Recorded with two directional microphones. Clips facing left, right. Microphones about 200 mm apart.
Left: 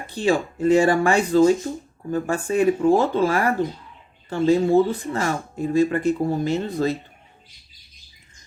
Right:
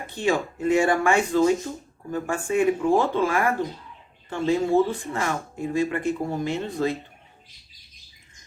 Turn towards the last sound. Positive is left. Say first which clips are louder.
# left 3 dB
turn(degrees=35)  # may be behind; listen again after turning